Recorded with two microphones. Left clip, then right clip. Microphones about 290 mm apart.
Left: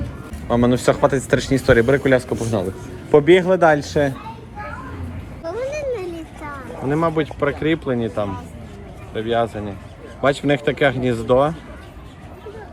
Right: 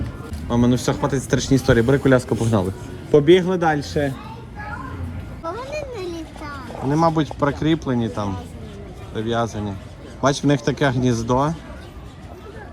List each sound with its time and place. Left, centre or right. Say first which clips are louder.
0.4 s a man's voice: left 4 dB; centre
3.1 s speech: left 2 dB; centre
5.5 s a sound: left 5 dB; centre
6.9 s speech: right 1 dB; centre